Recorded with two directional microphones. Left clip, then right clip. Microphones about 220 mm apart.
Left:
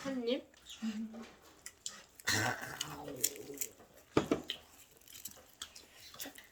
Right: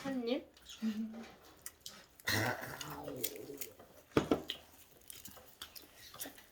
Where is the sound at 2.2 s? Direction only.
10° left (ahead or behind).